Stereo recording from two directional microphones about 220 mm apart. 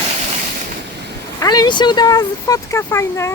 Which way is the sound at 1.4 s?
15° left (ahead or behind).